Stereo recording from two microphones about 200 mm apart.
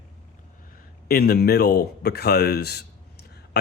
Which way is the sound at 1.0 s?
50° left (ahead or behind).